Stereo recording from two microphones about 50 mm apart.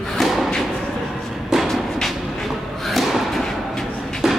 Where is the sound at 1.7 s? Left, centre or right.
Centre.